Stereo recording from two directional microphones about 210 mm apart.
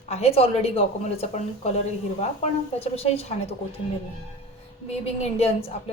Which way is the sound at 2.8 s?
30° left (ahead or behind).